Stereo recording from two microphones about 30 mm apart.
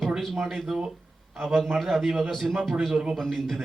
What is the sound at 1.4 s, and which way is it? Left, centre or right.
A man's voice, centre.